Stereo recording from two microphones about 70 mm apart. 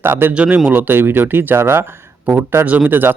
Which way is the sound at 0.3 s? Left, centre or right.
Right.